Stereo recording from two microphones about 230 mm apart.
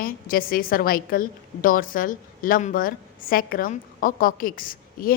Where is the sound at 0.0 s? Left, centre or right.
Left.